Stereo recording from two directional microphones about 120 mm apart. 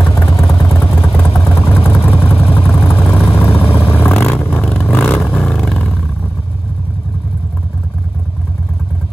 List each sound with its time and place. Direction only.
0.3 s vehicle: 30° left (ahead or behind)
0.8 s vehicle: 15° left (ahead or behind)
1.4 s vehicle: 25° left (ahead or behind); by 5.9 s 5° left (ahead or behind)